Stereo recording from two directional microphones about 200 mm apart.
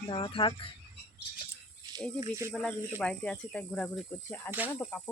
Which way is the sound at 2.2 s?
15° right (ahead or behind).